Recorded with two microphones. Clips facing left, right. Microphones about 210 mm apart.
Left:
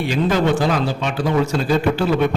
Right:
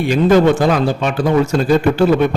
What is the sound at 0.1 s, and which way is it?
A man's voice, 50° right (ahead or behind).